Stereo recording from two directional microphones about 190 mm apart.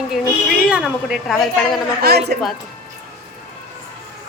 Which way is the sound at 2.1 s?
55° right (ahead or behind).